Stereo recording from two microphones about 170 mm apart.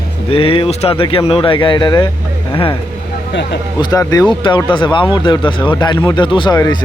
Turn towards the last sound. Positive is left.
turn(degrees=25)  # may be behind; listen again after turning